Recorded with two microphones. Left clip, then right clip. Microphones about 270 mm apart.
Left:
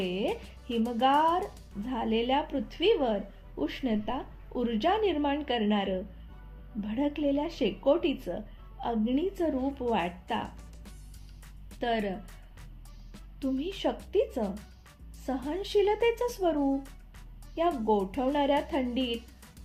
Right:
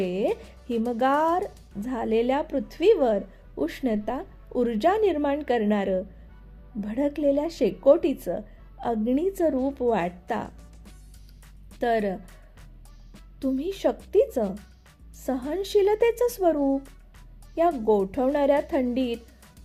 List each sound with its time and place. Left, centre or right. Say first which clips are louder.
0.1 s music: right 6 dB; right
0.9 s speech: right 2 dB; right
1.4 s speech: right 4 dB; centre
1.8 s speech: right 5 dB; right
11.8 s speech: right 6 dB; right
13.4 s speech: right 5 dB; right
16.6 s speech: right 5 dB; centre
17.9 s speech: right 5 dB; right
18.9 s speech: right 4 dB; centre